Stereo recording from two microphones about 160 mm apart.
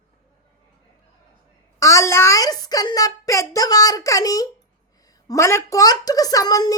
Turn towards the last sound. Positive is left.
turn(degrees=25)  # may be behind; listen again after turning